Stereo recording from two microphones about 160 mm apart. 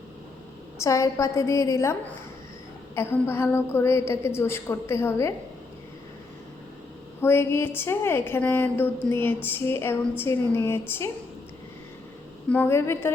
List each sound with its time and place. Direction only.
0.8 s a woman's voice: 20° left (ahead or behind)
7.2 s a woman's voice: 15° left (ahead or behind)
12.5 s a woman's voice: 15° left (ahead or behind)